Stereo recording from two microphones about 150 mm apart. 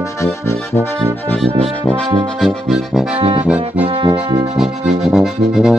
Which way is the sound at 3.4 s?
10° right (ahead or behind).